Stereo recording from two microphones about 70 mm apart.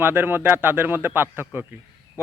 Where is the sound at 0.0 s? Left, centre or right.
Right.